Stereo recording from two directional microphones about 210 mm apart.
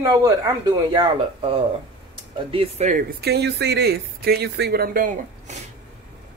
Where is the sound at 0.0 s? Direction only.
15° right (ahead or behind); by 5.6 s 40° right (ahead or behind).